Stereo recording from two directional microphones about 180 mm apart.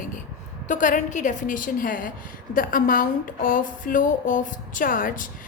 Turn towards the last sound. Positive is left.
turn(degrees=50)  # may be behind; listen again after turning